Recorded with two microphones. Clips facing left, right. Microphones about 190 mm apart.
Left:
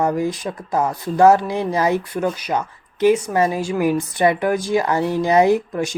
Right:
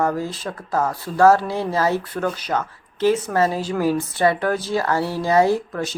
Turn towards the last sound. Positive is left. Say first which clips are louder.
# left 3 dB
turn(degrees=15)  # may be behind; listen again after turning